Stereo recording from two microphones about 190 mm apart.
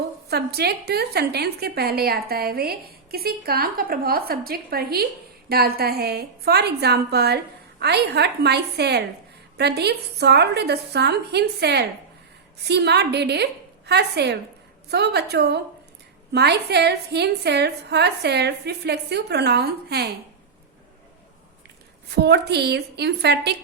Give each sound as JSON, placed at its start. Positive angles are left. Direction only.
{"t": 0.3, "sound": "a woman's voice", "side_deg": -55}
{"t": 22.1, "sound": "a woman's voice", "side_deg": -60}